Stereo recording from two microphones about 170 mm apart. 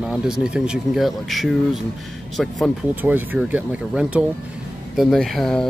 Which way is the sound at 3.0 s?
10° right (ahead or behind).